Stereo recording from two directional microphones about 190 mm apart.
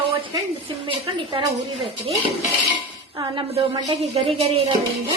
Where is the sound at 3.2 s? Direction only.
25° right (ahead or behind).